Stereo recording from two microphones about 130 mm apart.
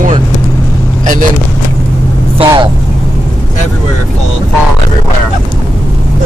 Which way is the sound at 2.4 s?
35° right (ahead or behind).